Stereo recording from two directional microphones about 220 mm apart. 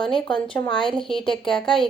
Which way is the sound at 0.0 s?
Centre (ahead or behind).